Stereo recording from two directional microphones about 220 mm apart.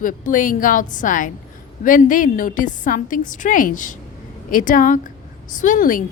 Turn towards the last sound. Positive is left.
turn(degrees=35)  # may be behind; listen again after turning